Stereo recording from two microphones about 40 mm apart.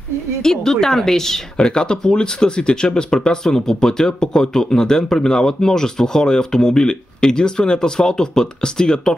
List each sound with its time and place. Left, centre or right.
0.4 s speech: centre
1.6 s speech: left